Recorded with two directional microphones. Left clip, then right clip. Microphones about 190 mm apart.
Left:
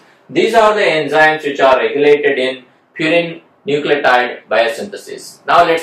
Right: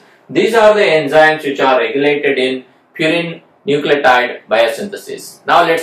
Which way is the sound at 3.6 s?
15° right (ahead or behind).